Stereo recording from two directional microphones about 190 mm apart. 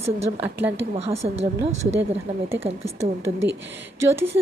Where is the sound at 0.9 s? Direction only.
35° right (ahead or behind).